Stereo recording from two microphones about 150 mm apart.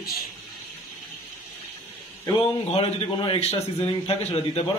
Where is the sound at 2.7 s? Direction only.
35° left (ahead or behind).